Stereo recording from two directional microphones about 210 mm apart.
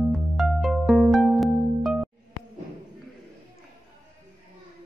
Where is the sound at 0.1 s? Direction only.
Centre (ahead or behind).